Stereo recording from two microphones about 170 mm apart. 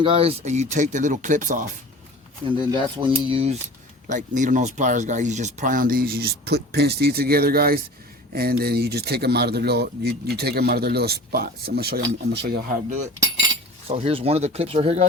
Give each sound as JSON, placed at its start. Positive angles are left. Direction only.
{"t": 0.0, "sound": "speech", "side_deg": -35}
{"t": 2.6, "sound": "speech", "side_deg": -30}
{"t": 4.0, "sound": "speech", "side_deg": -50}
{"t": 13.8, "sound": "speech", "side_deg": -35}